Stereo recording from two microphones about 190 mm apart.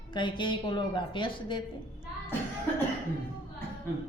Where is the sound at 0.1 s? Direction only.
25° left (ahead or behind).